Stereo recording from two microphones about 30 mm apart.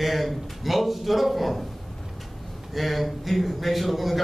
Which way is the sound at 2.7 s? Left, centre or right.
Centre.